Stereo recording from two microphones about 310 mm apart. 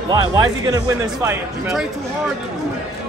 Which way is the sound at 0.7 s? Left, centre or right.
Centre.